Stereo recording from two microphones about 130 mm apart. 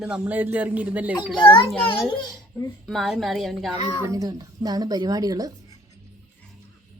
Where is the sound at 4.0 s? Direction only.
25° right (ahead or behind).